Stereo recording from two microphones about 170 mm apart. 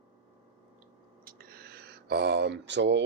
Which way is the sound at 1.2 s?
60° right (ahead or behind).